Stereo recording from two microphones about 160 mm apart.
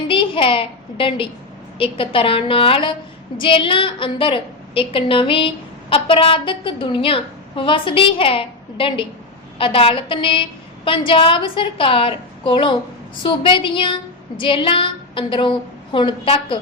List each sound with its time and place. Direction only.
0.1 s a woman's voice: 35° left (ahead or behind)